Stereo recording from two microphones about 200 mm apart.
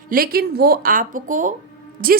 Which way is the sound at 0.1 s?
45° right (ahead or behind).